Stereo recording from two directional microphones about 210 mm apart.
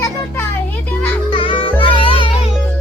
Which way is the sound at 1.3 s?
25° left (ahead or behind).